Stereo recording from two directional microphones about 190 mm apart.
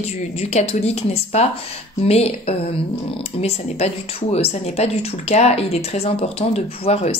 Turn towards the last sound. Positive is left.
turn(degrees=30)  # may be behind; listen again after turning